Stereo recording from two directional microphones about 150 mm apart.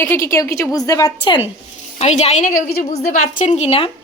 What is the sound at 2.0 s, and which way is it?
Speech, 45° left (ahead or behind).